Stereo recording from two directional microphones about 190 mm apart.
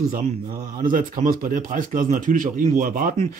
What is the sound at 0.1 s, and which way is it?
Speech, 50° right (ahead or behind).